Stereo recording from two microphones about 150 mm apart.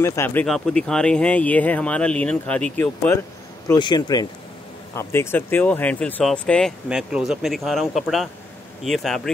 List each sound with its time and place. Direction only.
0.0 s speech: 15° left (ahead or behind)
0.5 s speech: 5° left (ahead or behind)
3.7 s speech: 30° left (ahead or behind)
4.9 s speech: 15° left (ahead or behind)
6.9 s speech: 5° right (ahead or behind)